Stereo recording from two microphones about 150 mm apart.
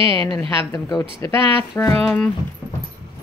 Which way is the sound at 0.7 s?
25° left (ahead or behind).